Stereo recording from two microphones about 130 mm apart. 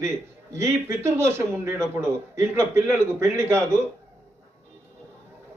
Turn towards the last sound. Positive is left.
turn(degrees=-20)  # may be behind; listen again after turning